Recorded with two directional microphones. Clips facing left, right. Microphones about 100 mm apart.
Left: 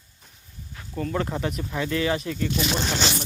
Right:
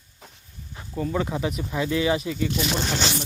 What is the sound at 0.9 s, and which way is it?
Speech, 10° right (ahead or behind).